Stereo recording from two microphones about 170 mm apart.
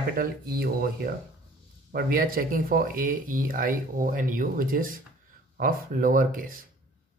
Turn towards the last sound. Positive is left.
turn(degrees=-55)  # may be behind; listen again after turning